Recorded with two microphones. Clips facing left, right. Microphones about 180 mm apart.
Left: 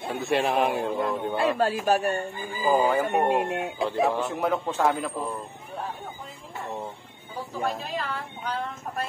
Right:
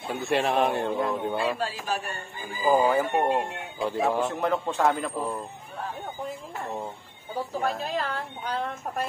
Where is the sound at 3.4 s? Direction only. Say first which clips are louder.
Left 8 dB; 70° left (ahead or behind).